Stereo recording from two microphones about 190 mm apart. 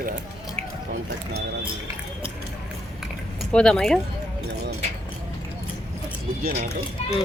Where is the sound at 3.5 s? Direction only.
5° left (ahead or behind).